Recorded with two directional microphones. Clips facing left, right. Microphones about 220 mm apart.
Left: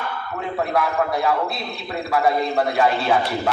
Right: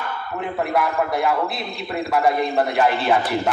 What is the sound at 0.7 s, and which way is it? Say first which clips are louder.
A man's voice: even; centre (ahead or behind).